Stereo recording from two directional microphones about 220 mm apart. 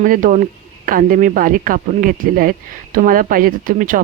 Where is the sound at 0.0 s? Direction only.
35° right (ahead or behind).